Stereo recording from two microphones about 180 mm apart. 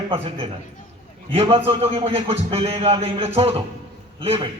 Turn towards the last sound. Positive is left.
turn(degrees=-30)  # may be behind; listen again after turning